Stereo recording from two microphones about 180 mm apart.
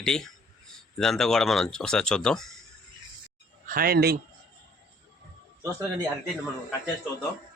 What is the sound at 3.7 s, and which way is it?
Speech, 55° right (ahead or behind).